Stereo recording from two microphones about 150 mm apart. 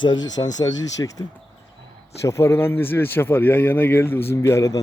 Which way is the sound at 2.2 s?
20° left (ahead or behind).